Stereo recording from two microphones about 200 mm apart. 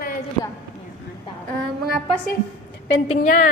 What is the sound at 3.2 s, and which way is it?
Speech, 40° left (ahead or behind).